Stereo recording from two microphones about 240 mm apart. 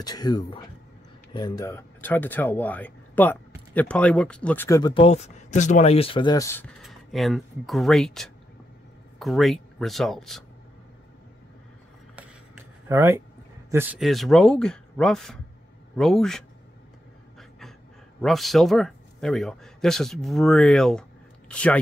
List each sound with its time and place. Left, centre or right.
0.0 s speech: centre
12.8 s speech: centre
17.4 s pant: centre
18.2 s speech: centre